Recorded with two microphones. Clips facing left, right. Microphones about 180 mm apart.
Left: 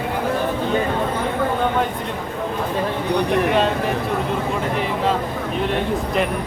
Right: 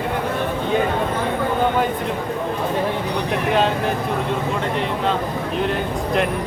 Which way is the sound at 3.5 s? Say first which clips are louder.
Even; centre (ahead or behind).